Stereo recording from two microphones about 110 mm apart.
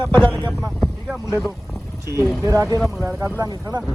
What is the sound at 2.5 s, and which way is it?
Speech, 30° right (ahead or behind).